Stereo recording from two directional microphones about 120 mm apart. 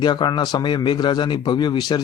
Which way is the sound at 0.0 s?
40° left (ahead or behind).